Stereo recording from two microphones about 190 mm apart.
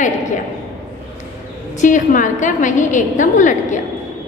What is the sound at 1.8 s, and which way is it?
A woman's voice, 40° left (ahead or behind).